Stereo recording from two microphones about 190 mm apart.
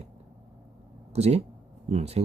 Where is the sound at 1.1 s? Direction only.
35° right (ahead or behind).